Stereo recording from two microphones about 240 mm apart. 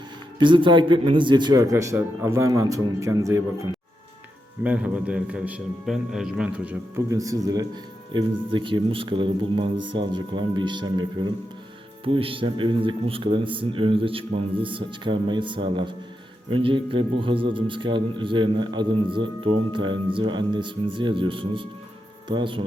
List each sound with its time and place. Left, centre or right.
0.3 s a man's voice: centre